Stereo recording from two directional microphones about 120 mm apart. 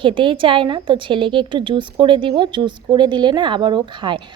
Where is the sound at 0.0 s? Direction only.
45° right (ahead or behind).